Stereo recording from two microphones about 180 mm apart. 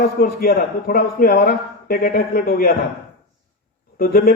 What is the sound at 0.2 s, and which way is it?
A man's voice, 55° left (ahead or behind).